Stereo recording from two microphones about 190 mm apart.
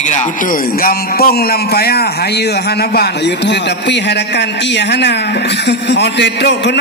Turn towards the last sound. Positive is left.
turn(degrees=65)  # may be behind; listen again after turning